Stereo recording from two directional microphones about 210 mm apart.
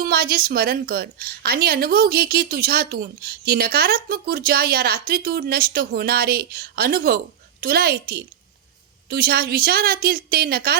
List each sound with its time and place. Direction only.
0.0 s a woman's voice: 45° right (ahead or behind)